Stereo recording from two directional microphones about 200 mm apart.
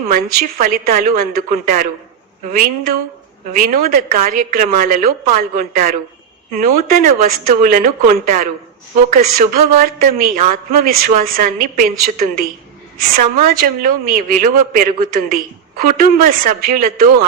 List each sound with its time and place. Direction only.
0.1 s a woman's voice: 45° right (ahead or behind)